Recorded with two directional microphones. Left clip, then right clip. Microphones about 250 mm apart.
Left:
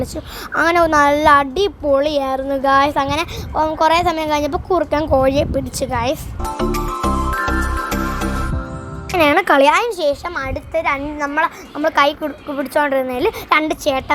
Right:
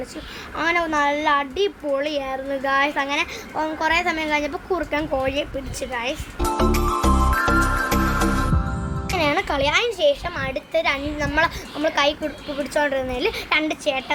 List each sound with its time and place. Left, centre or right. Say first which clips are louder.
0.5 s speech: left 8 dB; left
6.4 s music: right 3 dB; centre
9.1 s speech: left 9 dB; left
10.7 s a woman's voice: left 3 dB; centre
11.8 s a woman's voice: left 5 dB; left